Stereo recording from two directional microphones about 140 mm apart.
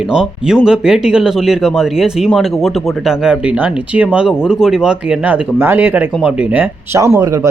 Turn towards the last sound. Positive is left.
turn(degrees=-20)  # may be behind; listen again after turning